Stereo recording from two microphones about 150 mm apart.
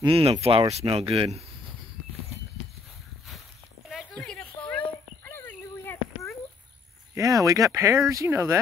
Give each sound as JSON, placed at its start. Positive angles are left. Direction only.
{"t": 0.0, "sound": "speech", "side_deg": -40}
{"t": 4.2, "sound": "a sound", "side_deg": 5}
{"t": 7.2, "sound": "speech", "side_deg": -20}